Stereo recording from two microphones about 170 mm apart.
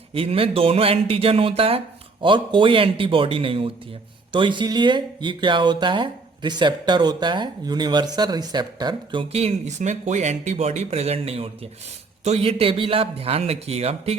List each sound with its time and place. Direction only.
0.1 s speech: 35° right (ahead or behind)
9.3 s speech: 35° right (ahead or behind)